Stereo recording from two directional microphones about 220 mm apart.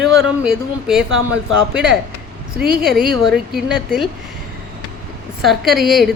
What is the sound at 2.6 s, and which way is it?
Speech, 45° right (ahead or behind).